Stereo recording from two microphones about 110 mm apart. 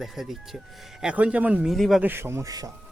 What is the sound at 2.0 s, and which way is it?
Speech, 20° right (ahead or behind).